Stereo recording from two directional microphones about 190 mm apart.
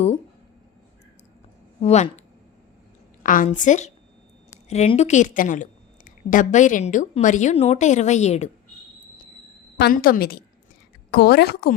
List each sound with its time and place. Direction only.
1.8 s a woman's voice: 35° left (ahead or behind)
3.2 s a woman's voice: 45° left (ahead or behind)
9.7 s a woman's voice: 55° left (ahead or behind)